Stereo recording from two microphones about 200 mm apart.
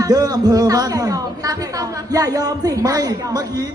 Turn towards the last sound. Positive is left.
turn(degrees=-20)  # may be behind; listen again after turning